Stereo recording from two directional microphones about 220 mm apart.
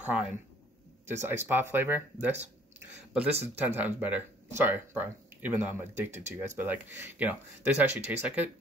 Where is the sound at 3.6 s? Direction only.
5° right (ahead or behind).